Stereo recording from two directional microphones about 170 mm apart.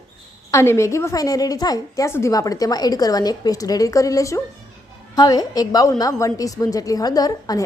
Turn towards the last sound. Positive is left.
turn(degrees=20)  # may be behind; listen again after turning